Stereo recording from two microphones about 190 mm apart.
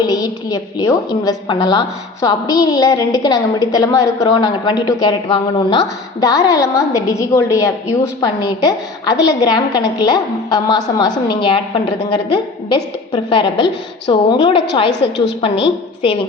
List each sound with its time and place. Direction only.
0.1 s a woman's voice: 20° left (ahead or behind)